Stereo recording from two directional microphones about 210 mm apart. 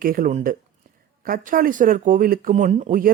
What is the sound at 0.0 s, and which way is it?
Speech, 40° right (ahead or behind).